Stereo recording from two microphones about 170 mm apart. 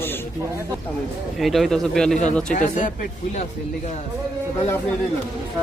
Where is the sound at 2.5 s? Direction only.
50° left (ahead or behind).